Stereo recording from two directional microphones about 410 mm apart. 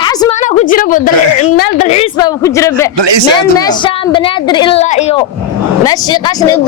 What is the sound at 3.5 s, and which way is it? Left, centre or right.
A woman's voice, centre.